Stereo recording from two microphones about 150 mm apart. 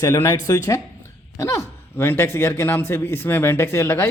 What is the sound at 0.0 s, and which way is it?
A man's voice, 25° left (ahead or behind).